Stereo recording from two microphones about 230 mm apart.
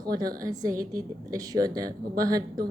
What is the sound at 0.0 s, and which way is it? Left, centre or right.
A woman's voice, centre.